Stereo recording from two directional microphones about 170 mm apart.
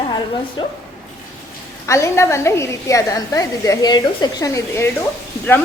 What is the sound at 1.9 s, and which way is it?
A woman's voice, 15° left (ahead or behind).